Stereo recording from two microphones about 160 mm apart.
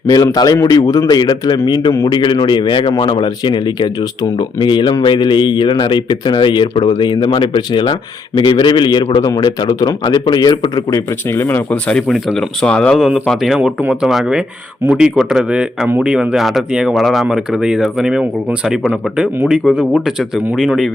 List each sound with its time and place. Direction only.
0.1 s a man's voice: 25° left (ahead or behind)
11.3 s speech: 15° left (ahead or behind); by 20.9 s centre (ahead or behind)